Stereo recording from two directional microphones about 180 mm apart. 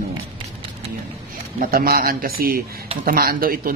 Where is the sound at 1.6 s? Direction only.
55° right (ahead or behind).